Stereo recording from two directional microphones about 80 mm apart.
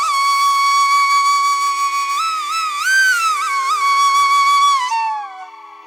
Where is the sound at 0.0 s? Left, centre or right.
Centre.